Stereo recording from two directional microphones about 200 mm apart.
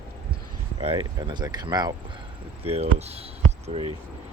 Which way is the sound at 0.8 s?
30° right (ahead or behind).